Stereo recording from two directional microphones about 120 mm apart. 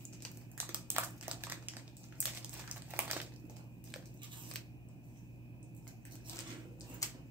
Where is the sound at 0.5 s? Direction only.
20° right (ahead or behind).